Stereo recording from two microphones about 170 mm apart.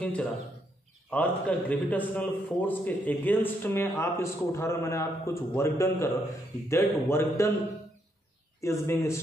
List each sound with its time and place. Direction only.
0.0 s a man's voice: 5° left (ahead or behind)
8.5 s a man's voice: 15° left (ahead or behind)